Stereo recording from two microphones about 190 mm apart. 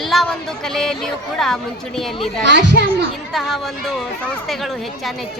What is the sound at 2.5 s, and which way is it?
Speech, 65° right (ahead or behind).